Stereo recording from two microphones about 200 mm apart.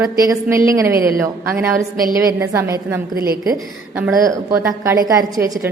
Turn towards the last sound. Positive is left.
turn(degrees=-10)  # may be behind; listen again after turning